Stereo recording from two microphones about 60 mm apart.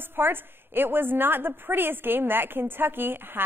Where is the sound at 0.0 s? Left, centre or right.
Right.